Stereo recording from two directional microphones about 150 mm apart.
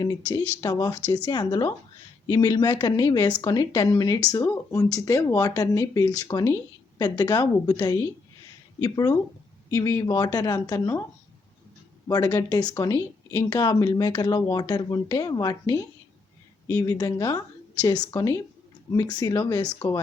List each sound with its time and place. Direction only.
0.0 s speech: 25° left (ahead or behind)
12.0 s speech: 25° left (ahead or behind)